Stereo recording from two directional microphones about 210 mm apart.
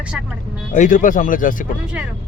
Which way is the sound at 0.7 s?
35° left (ahead or behind).